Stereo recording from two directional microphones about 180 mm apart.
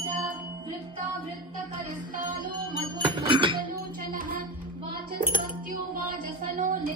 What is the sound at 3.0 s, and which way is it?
Music, 30° right (ahead or behind).